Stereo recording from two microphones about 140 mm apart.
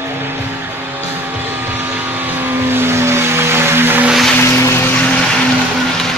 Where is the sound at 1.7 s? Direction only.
15° right (ahead or behind).